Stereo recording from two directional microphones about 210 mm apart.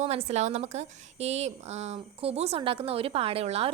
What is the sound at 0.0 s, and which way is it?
A woman's voice, 30° right (ahead or behind).